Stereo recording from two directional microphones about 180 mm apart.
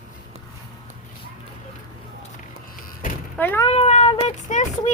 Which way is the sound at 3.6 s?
35° left (ahead or behind).